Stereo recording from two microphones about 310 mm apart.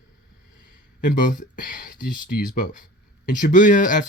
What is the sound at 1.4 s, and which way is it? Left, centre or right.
Speech, left.